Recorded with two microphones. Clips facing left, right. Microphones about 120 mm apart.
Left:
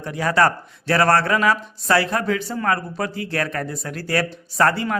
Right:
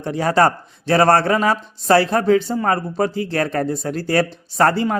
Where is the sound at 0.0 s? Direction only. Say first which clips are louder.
Right 3 dB; 30° right (ahead or behind).